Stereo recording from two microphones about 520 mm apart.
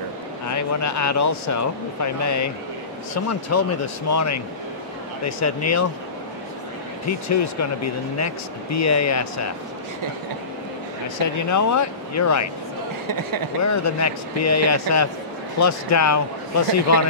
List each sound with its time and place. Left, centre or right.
0.5 s speech: left
7.1 s speech: left
11.3 s speech: left
13.0 s speech: right
13.7 s speech: left